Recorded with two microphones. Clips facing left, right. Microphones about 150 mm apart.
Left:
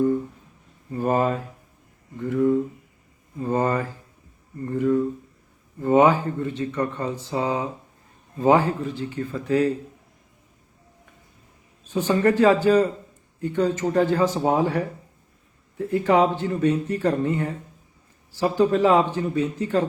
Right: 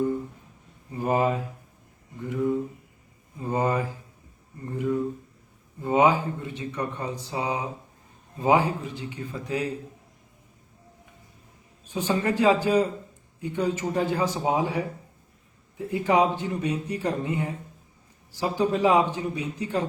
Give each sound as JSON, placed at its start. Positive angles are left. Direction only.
{"t": 0.9, "sound": "speech", "side_deg": -15}
{"t": 3.4, "sound": "speech", "side_deg": -15}
{"t": 11.9, "sound": "speech", "side_deg": -10}